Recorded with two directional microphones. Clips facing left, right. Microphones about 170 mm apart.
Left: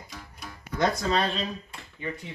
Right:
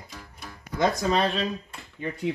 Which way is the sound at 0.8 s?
15° right (ahead or behind).